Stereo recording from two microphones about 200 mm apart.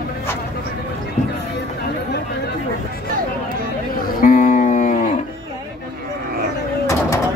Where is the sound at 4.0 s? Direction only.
45° left (ahead or behind).